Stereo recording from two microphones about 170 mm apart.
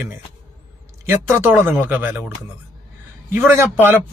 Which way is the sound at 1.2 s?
15° right (ahead or behind).